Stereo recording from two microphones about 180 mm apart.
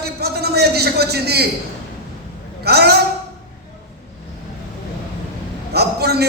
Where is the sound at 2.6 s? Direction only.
65° right (ahead or behind).